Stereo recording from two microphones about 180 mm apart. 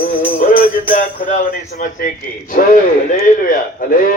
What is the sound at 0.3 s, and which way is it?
Music, 45° left (ahead or behind).